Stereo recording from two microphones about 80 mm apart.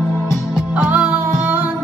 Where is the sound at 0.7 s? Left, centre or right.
Centre.